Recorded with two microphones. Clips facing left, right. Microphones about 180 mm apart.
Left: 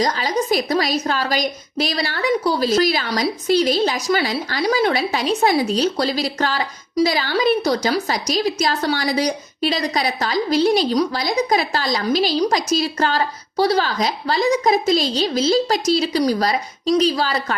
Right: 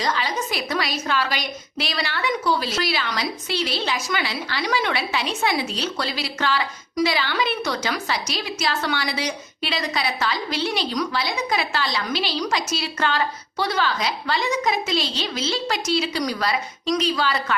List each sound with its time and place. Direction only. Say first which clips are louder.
0.0 s a woman's voice: left 5 dB; 40° left (ahead or behind)